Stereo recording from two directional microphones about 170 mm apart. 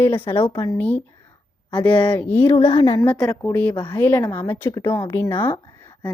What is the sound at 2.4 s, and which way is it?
Speech, 30° left (ahead or behind).